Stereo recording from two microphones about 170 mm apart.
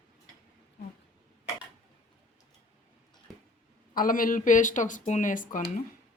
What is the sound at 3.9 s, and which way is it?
Speech, 55° left (ahead or behind).